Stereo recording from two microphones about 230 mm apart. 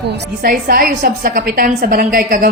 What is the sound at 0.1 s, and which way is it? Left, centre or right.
A woman's voice, right.